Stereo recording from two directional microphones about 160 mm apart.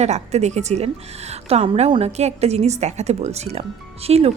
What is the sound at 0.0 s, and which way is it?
A woman's voice, 45° right (ahead or behind).